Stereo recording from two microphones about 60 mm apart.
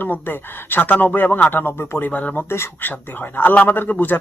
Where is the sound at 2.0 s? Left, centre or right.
Left.